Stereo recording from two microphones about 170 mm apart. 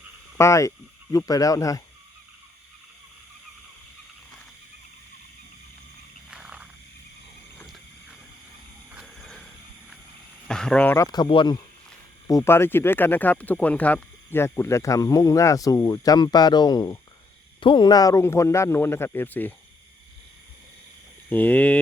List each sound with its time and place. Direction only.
0.3 s speech: 15° left (ahead or behind)
6.3 s wild animals: 5° right (ahead or behind)
9.0 s wild animals: centre (ahead or behind)
10.5 s speech: 5° left (ahead or behind); by 11.5 s 25° left (ahead or behind)
12.3 s speech: 15° left (ahead or behind)
21.2 s speech: 10° left (ahead or behind)